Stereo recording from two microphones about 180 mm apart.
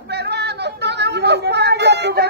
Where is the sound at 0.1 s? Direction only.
65° right (ahead or behind).